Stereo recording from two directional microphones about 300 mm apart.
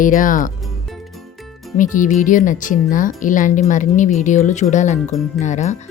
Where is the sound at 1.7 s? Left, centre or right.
Left.